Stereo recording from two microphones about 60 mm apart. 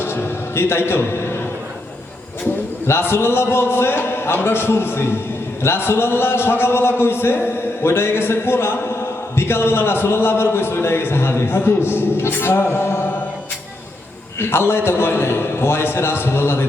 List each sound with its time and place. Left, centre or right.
0.0 s a sound: left
2.8 s a man's voice: left
14.3 s a man's voice: left